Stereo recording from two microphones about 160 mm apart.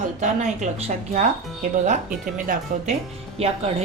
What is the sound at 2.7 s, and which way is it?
Speech, 55° right (ahead or behind).